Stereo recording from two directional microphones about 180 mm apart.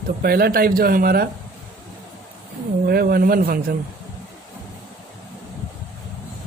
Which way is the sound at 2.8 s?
55° right (ahead or behind).